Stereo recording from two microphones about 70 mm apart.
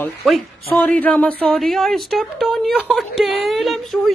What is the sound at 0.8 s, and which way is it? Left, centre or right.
Speech, left.